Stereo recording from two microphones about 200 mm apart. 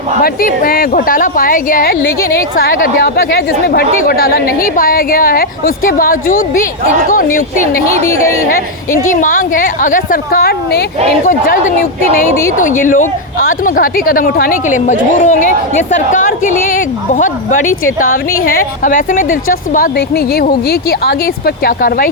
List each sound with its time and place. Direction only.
0.2 s speech: 45° left (ahead or behind)
8.0 s a woman's voice: 15° left (ahead or behind)
9.0 s a woman's voice: 40° left (ahead or behind)